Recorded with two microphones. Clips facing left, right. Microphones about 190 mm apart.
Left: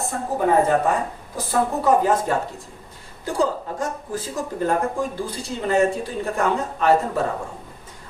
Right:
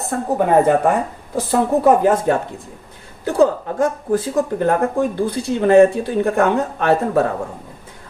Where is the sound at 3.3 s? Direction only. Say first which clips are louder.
Right 7 dB; 60° right (ahead or behind).